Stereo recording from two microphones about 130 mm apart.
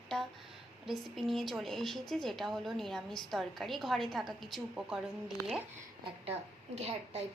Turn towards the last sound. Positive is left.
turn(degrees=-55)  # may be behind; listen again after turning